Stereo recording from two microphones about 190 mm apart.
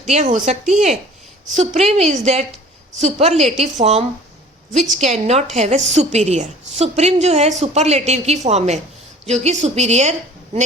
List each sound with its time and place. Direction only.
0.0 s a woman's voice: 40° right (ahead or behind)